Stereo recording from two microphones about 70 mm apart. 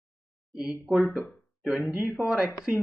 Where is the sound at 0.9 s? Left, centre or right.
Centre.